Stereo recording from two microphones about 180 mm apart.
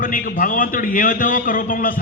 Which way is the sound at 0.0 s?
50° left (ahead or behind).